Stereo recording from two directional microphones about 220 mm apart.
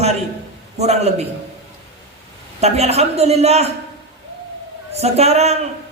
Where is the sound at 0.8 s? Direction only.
30° right (ahead or behind).